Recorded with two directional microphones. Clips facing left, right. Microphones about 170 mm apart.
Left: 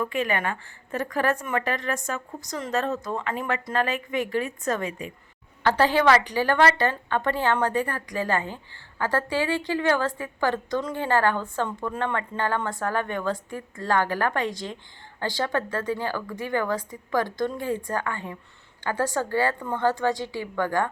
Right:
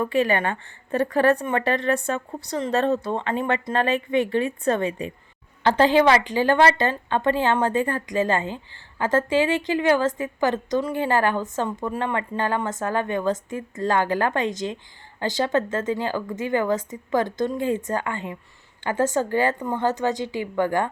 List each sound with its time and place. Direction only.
0.0 s a woman's voice: 35° right (ahead or behind)
5.6 s a woman's voice: 20° right (ahead or behind)